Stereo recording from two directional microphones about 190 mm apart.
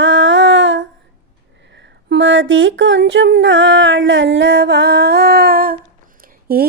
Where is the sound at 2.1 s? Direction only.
80° right; by 5.8 s 50° right (ahead or behind).